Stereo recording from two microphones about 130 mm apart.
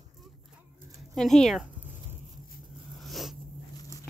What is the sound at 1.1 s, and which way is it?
Speech, centre (ahead or behind).